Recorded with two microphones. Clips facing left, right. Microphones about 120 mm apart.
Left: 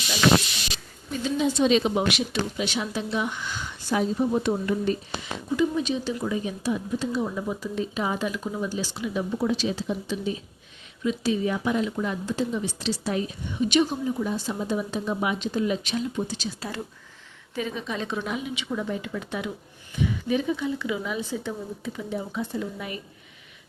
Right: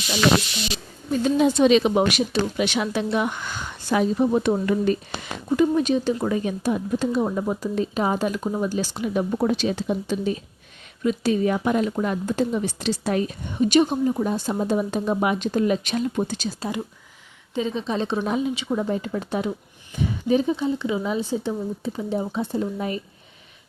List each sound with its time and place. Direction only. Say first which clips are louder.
1.1 s speech: right 6 dB; 50° right (ahead or behind)
2.0 s speech: right 4 dB; 45° right (ahead or behind)
2.6 s speech: right 5 dB; 70° right (ahead or behind); by 16.5 s 50° right (ahead or behind)
16.6 s speech: right 5 dB; 15° right (ahead or behind); by 23.0 s 30° right (ahead or behind)